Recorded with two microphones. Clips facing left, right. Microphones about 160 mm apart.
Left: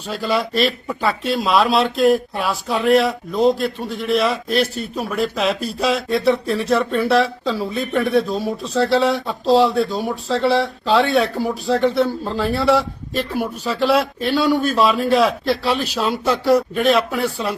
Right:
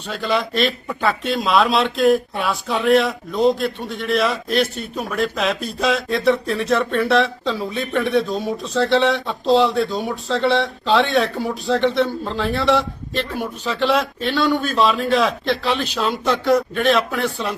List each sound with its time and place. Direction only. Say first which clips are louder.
0.1 s speech: left 1 dB; centre (ahead or behind)